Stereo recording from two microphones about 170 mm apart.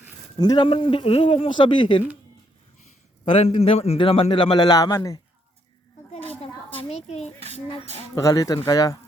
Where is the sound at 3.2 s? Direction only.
30° left (ahead or behind).